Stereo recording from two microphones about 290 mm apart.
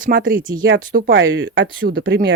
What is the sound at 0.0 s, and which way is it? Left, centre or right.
Speech, right.